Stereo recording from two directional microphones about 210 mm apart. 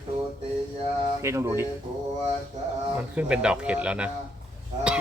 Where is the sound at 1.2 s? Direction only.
15° right (ahead or behind).